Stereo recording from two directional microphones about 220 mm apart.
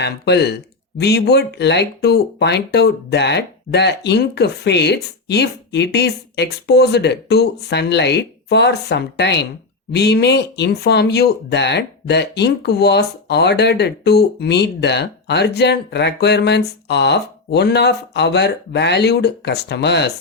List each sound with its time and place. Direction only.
0.0 s speech: 50° left (ahead or behind)